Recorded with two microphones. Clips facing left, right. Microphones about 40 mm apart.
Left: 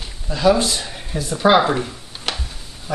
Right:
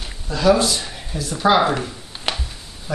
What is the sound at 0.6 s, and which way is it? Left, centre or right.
Speech, left.